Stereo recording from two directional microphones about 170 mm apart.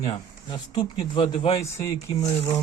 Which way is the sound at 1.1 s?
35° left (ahead or behind).